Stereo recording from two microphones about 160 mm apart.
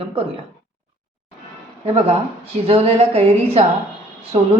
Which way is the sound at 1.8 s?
40° right (ahead or behind).